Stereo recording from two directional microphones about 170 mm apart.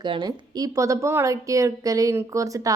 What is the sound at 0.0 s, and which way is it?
A woman's voice, 25° right (ahead or behind).